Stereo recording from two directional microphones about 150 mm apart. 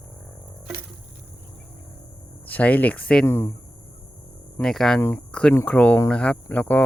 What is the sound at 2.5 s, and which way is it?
Speech, 10° left (ahead or behind).